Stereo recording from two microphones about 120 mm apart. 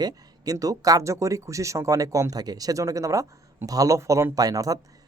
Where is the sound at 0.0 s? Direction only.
30° right (ahead or behind).